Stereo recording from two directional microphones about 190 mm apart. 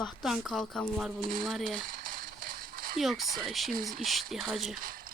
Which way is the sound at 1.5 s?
Centre (ahead or behind).